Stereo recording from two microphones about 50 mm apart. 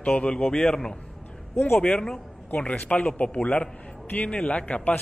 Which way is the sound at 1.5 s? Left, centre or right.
Left.